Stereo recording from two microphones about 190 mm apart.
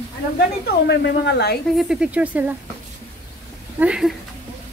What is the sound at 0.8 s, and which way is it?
Speech, 65° left (ahead or behind).